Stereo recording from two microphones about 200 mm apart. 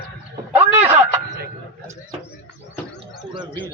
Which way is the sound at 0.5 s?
10° right (ahead or behind).